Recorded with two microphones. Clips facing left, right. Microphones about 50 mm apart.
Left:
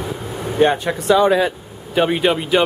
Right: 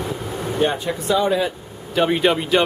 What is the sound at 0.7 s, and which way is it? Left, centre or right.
Speech, left.